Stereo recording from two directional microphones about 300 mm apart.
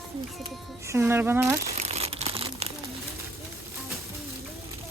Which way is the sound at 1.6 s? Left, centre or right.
Right.